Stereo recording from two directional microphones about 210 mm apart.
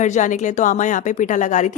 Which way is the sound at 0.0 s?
35° left (ahead or behind).